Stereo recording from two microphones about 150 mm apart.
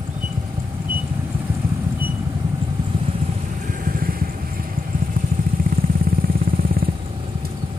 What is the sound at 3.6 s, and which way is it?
Vehicle, 70° right (ahead or behind).